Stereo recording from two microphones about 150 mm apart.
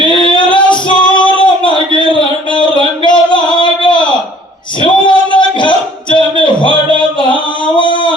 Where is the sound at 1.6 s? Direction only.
35° left (ahead or behind).